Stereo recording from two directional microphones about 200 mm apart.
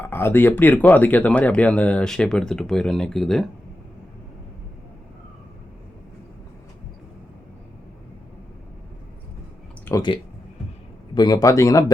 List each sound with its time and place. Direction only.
0.0 s speech: 10° left (ahead or behind)
9.8 s speech: 20° left (ahead or behind)